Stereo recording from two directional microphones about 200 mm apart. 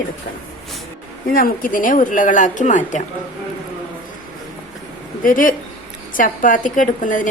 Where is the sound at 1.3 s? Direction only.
45° left (ahead or behind).